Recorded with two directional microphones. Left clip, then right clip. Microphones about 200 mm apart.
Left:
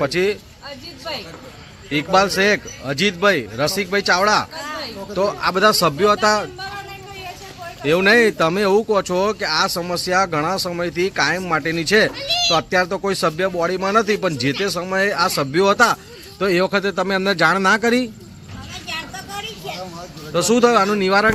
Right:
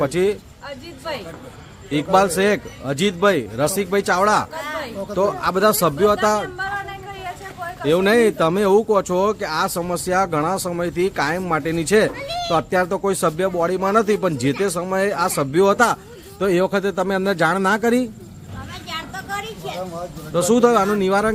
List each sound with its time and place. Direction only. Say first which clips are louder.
0.0 s speech: even; 10° right (ahead or behind)
1.9 s speech: even; 10° right (ahead or behind)
4.6 s a sound: right 1 dB; 30° right (ahead or behind)
5.3 s speech: left 4 dB; 5° right (ahead or behind)
7.8 s speech: left 2 dB; centre (ahead or behind)
19.4 s a sound: even; centre (ahead or behind)
20.3 s speech: left 1 dB; 5° right (ahead or behind)